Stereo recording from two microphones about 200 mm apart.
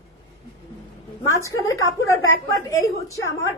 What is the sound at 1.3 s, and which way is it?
Speech, 15° left (ahead or behind).